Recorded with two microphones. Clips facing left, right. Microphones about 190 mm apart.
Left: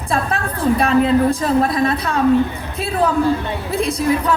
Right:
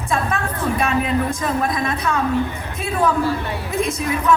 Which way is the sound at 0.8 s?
30° left (ahead or behind).